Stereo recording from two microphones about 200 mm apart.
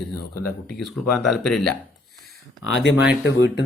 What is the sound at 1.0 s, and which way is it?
Speech, centre (ahead or behind).